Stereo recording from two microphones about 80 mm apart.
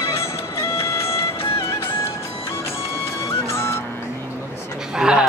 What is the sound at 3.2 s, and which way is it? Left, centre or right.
Music, left.